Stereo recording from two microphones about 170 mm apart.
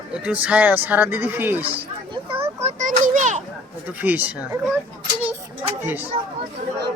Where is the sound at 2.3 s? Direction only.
40° right (ahead or behind).